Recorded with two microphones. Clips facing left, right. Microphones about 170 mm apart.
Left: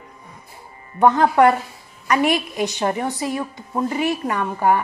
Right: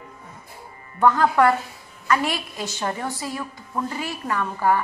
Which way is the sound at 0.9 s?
20° left (ahead or behind).